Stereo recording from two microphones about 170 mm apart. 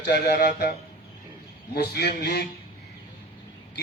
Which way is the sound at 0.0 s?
65° left (ahead or behind).